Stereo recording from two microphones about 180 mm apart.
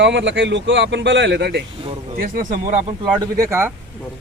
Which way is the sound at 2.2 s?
50° right (ahead or behind).